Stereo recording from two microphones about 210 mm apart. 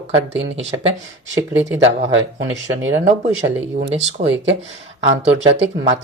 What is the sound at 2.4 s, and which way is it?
Speech, 60° right (ahead or behind).